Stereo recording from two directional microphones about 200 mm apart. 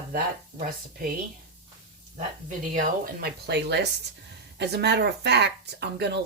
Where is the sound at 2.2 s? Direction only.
40° right (ahead or behind); by 6.2 s 55° right (ahead or behind).